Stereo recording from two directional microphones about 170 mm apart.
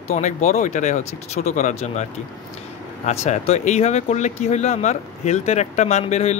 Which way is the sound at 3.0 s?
40° left (ahead or behind).